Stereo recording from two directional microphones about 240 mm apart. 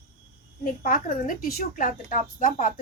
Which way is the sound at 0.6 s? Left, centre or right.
Left.